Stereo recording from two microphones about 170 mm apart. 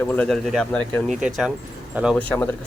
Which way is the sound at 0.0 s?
10° left (ahead or behind).